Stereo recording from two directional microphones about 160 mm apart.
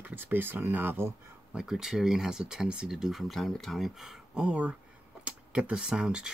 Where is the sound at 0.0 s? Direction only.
10° right (ahead or behind).